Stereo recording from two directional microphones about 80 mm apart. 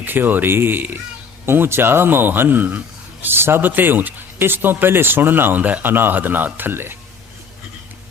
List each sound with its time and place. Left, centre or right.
0.0 s speech: right